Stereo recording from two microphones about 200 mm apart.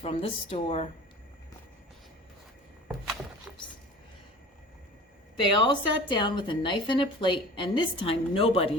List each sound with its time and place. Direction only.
0.0 s a woman's voice: 30° left (ahead or behind)
5.5 s a woman's voice: 25° left (ahead or behind)